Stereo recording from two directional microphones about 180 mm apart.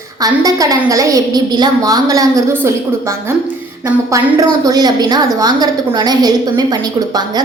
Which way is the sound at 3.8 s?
20° right (ahead or behind).